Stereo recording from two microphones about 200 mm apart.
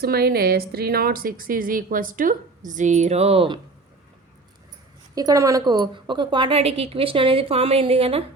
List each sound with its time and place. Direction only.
0.0 s a woman's voice: 50° right (ahead or behind); by 3.6 s 25° right (ahead or behind)
5.1 s speech: 15° right (ahead or behind)